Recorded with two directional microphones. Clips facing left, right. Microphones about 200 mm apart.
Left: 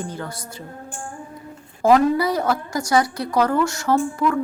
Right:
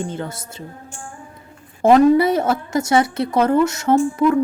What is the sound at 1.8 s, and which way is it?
A woman's voice, 25° right (ahead or behind).